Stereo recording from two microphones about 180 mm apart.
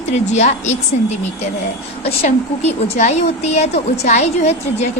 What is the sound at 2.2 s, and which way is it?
A woman's voice, 40° left (ahead or behind).